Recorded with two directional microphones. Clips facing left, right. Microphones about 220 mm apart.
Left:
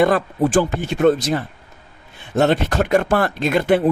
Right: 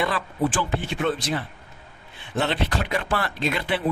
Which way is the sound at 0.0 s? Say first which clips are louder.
Left 8 dB; 45° left (ahead or behind).